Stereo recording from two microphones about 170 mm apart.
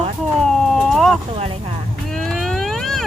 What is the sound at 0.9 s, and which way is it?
Speech, centre (ahead or behind).